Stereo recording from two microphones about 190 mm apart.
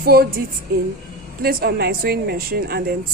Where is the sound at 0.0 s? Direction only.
50° right (ahead or behind).